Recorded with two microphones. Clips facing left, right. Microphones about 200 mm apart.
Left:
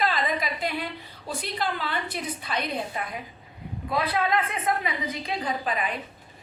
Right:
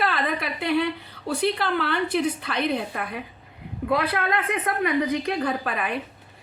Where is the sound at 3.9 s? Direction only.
60° right (ahead or behind).